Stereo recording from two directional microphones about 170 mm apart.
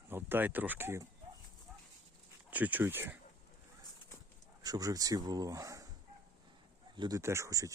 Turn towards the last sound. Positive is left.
turn(degrees=-20)  # may be behind; listen again after turning